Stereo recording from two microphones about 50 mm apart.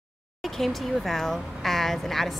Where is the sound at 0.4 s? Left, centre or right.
Centre.